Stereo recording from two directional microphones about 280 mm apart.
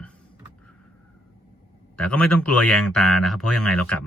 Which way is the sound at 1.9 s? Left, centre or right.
Centre.